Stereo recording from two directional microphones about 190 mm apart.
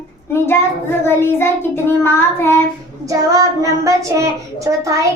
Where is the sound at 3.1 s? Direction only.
15° right (ahead or behind).